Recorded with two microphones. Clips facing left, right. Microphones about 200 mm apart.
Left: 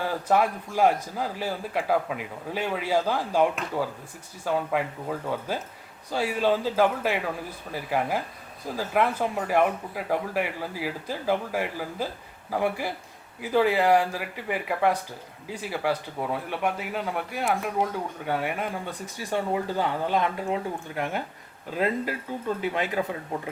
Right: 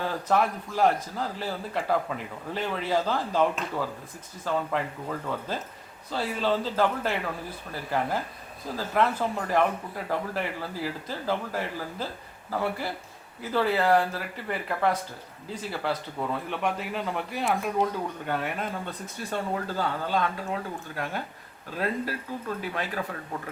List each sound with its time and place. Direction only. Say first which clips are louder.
0.3 s a man's voice: left 2 dB; 10° left (ahead or behind)